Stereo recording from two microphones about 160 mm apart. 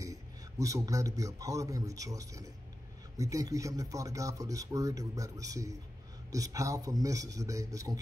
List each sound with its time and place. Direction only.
0.0 s a man's voice: 20° right (ahead or behind)